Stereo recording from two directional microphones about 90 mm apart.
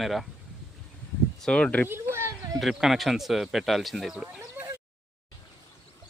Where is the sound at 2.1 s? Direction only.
30° right (ahead or behind).